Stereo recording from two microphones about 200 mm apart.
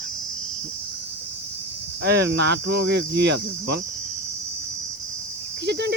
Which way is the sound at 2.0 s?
55° right (ahead or behind).